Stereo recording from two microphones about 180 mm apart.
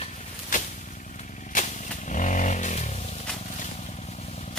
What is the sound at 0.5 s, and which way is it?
Vehicle, 45° left (ahead or behind).